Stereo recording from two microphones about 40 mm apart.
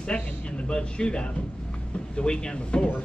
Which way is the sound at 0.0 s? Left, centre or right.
Left.